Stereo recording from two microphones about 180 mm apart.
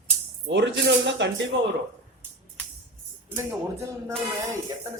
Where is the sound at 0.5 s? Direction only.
75° right (ahead or behind).